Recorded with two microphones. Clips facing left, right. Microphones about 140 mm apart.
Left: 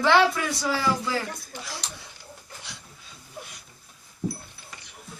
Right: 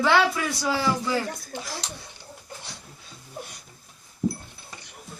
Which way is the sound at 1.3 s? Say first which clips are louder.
Right 3 dB; 40° right (ahead or behind).